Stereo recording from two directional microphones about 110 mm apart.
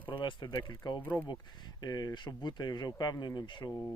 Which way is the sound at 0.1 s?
45° left (ahead or behind).